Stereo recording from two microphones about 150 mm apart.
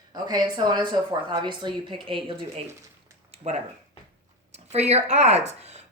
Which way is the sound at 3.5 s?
50° right (ahead or behind).